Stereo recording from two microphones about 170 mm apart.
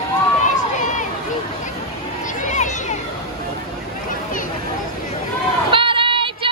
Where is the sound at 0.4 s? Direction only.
45° left (ahead or behind).